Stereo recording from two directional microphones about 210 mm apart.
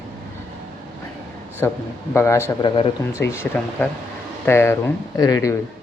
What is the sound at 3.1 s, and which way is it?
A man's voice, 10° left (ahead or behind).